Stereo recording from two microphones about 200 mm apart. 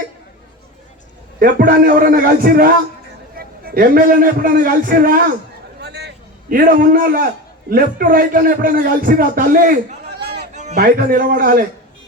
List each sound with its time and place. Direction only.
1.4 s a man's voice: 45° right (ahead or behind)
5.8 s a sound: 55° right (ahead or behind)
7.7 s a man's voice: 45° right (ahead or behind)
10.5 s music: 35° right (ahead or behind)
10.8 s a man's voice: 45° right (ahead or behind)